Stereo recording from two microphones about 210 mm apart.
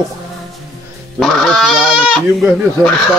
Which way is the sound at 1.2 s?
Centre (ahead or behind).